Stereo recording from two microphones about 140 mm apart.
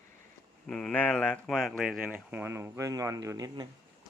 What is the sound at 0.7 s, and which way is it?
Speech, 5° left (ahead or behind).